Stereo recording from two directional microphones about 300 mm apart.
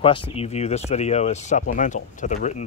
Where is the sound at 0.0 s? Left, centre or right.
Centre.